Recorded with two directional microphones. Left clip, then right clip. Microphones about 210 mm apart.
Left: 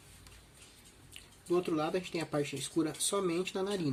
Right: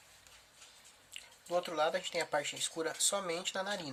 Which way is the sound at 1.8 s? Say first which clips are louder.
Right 2 dB; 45° right (ahead or behind).